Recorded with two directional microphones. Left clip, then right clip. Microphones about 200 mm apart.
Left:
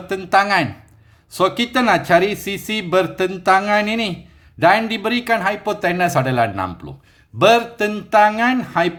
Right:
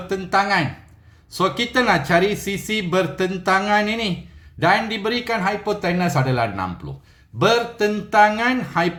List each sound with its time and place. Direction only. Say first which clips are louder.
0.1 s speech: left 3 dB; 40° left (ahead or behind)